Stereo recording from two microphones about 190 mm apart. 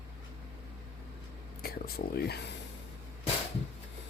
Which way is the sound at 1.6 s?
55° left (ahead or behind).